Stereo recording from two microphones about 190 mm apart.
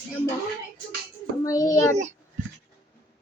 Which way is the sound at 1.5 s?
15° left (ahead or behind).